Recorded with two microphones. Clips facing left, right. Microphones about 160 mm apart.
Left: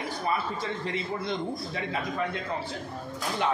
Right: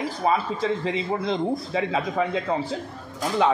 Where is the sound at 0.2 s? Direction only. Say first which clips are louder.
Right 7 dB; 90° right.